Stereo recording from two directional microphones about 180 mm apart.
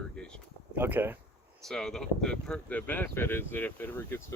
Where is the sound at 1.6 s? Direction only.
Centre (ahead or behind).